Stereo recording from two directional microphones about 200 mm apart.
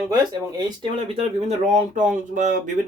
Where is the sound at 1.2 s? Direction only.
35° right (ahead or behind).